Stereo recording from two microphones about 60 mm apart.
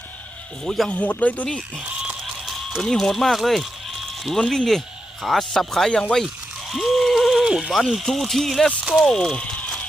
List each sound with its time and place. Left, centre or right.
0.6 s speech: centre
0.9 s speech: left
2.2 s a sound: centre
2.8 s speech: centre
6.7 s a sound: centre
7.9 s speech: centre